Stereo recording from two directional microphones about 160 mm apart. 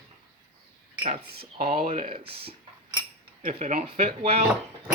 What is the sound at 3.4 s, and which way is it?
Speech, 60° right (ahead or behind).